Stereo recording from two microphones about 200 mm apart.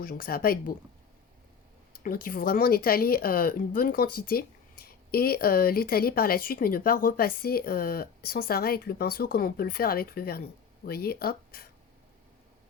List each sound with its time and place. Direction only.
0.0 s a woman's voice: 45° left (ahead or behind)
2.0 s a woman's voice: 45° left (ahead or behind)